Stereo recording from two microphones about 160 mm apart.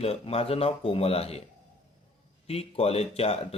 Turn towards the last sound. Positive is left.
turn(degrees=40)  # may be behind; listen again after turning